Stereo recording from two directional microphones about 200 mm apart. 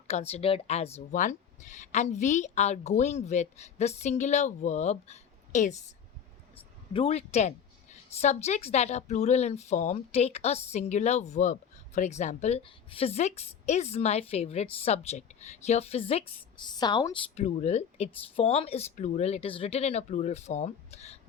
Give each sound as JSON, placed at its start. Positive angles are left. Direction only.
{"t": 0.1, "sound": "speech", "side_deg": 30}
{"t": 6.9, "sound": "speech", "side_deg": 30}
{"t": 17.4, "sound": "speech", "side_deg": 35}